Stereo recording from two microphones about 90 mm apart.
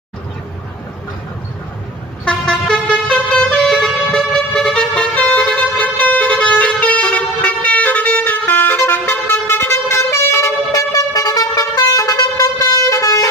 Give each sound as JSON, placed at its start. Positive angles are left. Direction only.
{"t": 2.2, "sound": "vehicle", "side_deg": 10}